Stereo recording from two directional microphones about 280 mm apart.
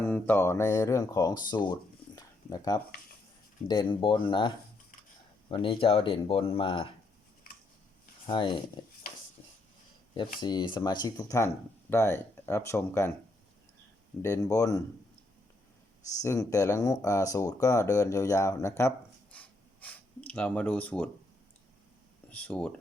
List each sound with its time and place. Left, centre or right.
0.0 s speech: centre
8.3 s speech: centre
10.4 s speech: centre
14.2 s speech: centre
16.2 s speech: centre
18.8 s a sound: centre
22.3 s speech: centre